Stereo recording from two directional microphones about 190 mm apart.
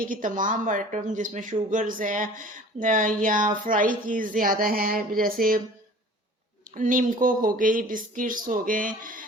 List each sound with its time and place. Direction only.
0.0 s speech: 45° right (ahead or behind)
6.7 s speech: 45° right (ahead or behind)